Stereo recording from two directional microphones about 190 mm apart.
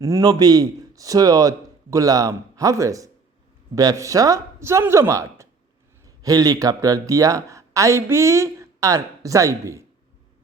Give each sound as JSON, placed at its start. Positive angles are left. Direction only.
{"t": 0.0, "sound": "a man's voice", "side_deg": -15}